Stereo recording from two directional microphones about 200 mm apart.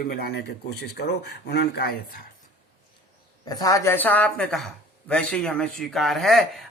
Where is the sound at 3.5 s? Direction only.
20° left (ahead or behind).